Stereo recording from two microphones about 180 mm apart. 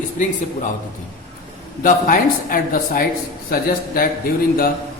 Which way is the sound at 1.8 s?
50° left (ahead or behind).